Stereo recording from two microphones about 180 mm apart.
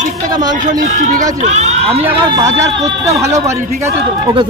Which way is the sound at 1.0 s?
45° right (ahead or behind).